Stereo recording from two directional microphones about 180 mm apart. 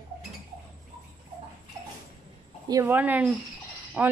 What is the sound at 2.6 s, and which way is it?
A woman's voice, 15° right (ahead or behind).